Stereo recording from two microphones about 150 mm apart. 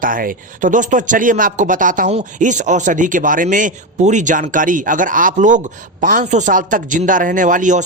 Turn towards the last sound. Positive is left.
turn(degrees=-60)  # may be behind; listen again after turning